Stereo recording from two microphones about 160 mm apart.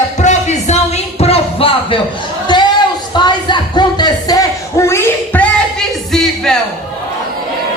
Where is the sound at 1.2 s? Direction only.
35° left (ahead or behind); by 5.5 s 10° left (ahead or behind).